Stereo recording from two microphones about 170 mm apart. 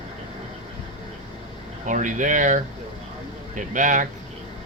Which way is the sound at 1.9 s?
50° right (ahead or behind).